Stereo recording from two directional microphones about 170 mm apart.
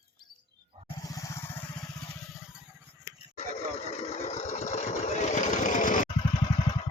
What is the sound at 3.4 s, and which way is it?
Vehicle, 40° left (ahead or behind).